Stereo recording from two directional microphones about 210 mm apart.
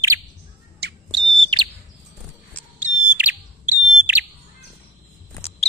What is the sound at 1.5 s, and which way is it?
Chirp, 20° right (ahead or behind).